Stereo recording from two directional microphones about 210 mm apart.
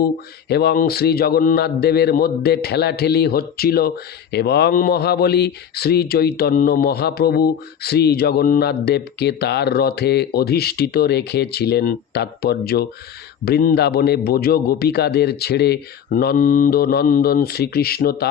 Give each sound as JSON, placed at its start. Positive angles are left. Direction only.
{"t": 0.4, "sound": "a man's voice", "side_deg": 50}